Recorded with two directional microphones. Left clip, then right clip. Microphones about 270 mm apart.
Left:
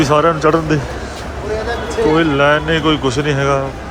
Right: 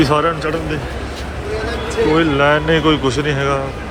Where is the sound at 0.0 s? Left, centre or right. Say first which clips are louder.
Left 3 dB; centre.